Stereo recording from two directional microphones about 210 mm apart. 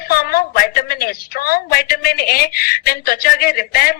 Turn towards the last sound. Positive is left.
turn(degrees=45)  # may be behind; listen again after turning